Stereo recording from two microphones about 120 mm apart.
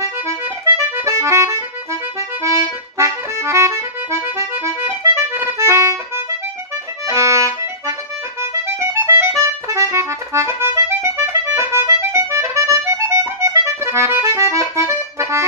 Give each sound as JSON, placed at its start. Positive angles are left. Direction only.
{"t": 0.0, "sound": "accordion", "side_deg": -25}